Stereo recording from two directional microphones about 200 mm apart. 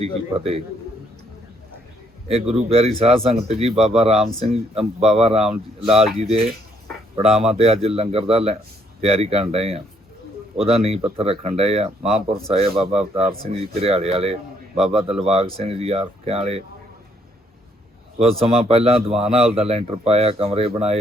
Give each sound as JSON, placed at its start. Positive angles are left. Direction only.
{"t": 0.0, "sound": "speech", "side_deg": -30}
{"t": 2.2, "sound": "a man's voice", "side_deg": -30}
{"t": 7.2, "sound": "a man's voice", "side_deg": -30}
{"t": 18.2, "sound": "a man's voice", "side_deg": -30}